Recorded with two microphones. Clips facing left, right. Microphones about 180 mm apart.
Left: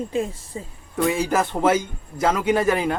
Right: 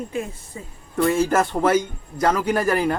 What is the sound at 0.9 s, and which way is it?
Speech, centre (ahead or behind).